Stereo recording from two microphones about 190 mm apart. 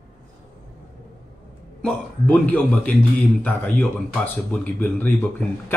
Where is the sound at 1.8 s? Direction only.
10° left (ahead or behind).